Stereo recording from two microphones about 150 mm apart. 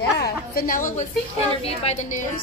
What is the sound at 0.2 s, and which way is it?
Music, 80° left.